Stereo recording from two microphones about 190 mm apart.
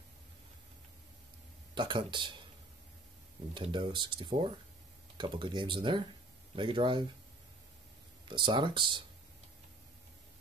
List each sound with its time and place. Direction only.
1.8 s speech: 25° right (ahead or behind)
3.5 s speech: 25° right (ahead or behind)
8.3 s speech: 25° right (ahead or behind)